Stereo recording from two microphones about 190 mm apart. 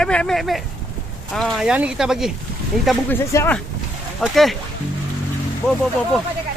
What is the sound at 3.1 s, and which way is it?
Speech, 10° left (ahead or behind).